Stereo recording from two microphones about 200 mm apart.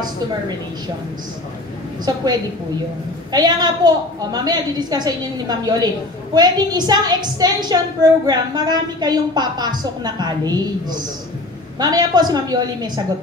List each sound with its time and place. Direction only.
2.0 s a woman's voice: 20° right (ahead or behind)